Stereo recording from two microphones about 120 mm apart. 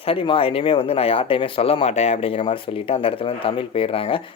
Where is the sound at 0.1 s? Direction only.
50° left (ahead or behind).